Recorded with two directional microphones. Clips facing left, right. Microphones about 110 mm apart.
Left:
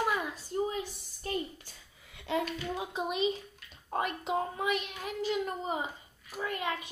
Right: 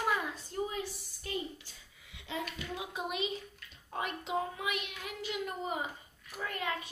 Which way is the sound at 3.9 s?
50° left (ahead or behind).